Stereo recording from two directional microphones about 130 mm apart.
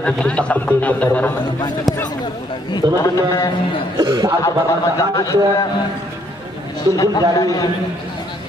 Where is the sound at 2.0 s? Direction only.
35° left (ahead or behind).